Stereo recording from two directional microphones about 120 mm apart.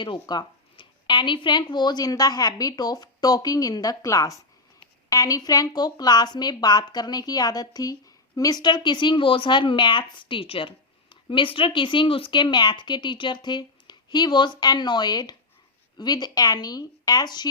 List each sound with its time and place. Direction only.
0.0 s speech: 40° left (ahead or behind)